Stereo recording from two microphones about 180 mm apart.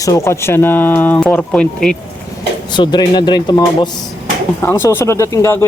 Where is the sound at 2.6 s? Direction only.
25° left (ahead or behind).